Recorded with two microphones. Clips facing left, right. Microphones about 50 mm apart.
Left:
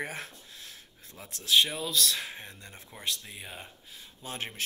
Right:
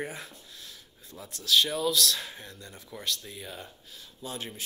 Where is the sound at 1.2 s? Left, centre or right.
Left.